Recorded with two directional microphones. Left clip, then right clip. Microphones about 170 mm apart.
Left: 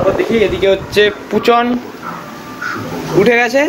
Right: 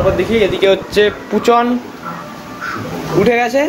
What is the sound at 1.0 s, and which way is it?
Speech, 15° right (ahead or behind).